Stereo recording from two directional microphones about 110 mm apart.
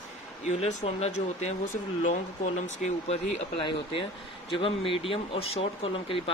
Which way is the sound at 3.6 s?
45° left (ahead or behind).